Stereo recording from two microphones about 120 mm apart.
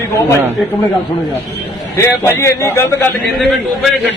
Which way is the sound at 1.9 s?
20° left (ahead or behind).